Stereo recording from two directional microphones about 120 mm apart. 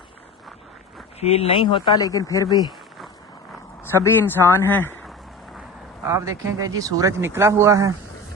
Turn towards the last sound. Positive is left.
turn(degrees=-25)  # may be behind; listen again after turning